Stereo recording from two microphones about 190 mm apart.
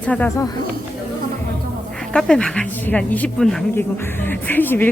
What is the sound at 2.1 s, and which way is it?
Speech, 5° left (ahead or behind).